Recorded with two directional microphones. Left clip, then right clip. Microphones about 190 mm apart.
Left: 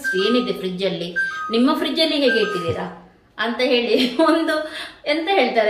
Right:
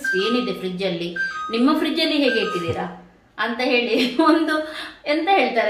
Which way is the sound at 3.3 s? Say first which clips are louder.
Left 1 dB; 10° right (ahead or behind).